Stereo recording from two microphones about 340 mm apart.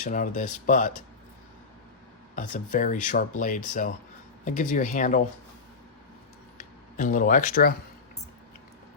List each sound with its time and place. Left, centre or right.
0.0 s speech: left
2.3 s speech: left
6.6 s speech: left